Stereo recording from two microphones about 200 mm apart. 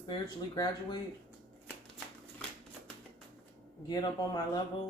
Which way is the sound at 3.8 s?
20° left (ahead or behind).